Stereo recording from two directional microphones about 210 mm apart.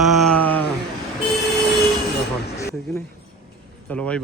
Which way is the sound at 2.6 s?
15° left (ahead or behind).